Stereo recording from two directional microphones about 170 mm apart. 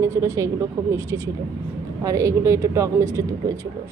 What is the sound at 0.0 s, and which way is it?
Speech, 15° right (ahead or behind).